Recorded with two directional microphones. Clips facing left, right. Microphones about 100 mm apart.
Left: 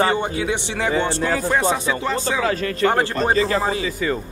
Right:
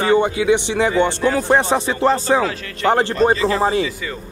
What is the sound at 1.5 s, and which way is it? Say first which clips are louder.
Speech: right 3 dB; 30° right (ahead or behind).